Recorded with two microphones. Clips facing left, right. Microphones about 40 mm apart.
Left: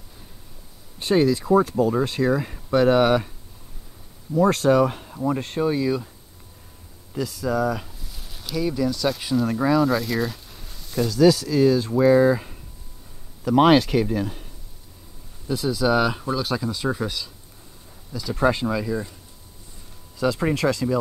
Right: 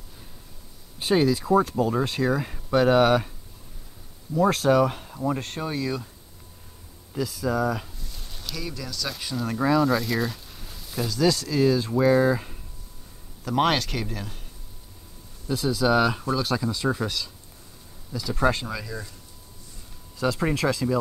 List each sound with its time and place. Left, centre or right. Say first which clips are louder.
0.9 s speech: left 2 dB; centre
4.4 s speech: left 2 dB; centre
7.1 s speech: left 1 dB; centre
15.4 s speech: left 1 dB; centre
20.2 s speech: left 2 dB; centre